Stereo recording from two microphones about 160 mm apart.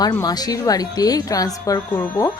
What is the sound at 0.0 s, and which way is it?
Speech, 25° left (ahead or behind).